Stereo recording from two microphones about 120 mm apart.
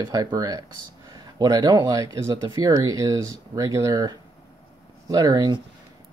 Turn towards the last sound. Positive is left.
turn(degrees=-35)  # may be behind; listen again after turning